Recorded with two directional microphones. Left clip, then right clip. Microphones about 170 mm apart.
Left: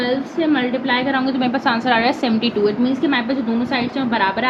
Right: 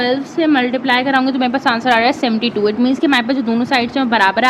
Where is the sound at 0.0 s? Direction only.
50° right (ahead or behind).